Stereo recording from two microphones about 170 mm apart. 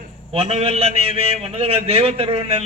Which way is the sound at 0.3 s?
35° right (ahead or behind).